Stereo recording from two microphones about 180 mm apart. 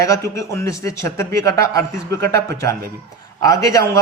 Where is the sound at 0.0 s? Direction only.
15° left (ahead or behind).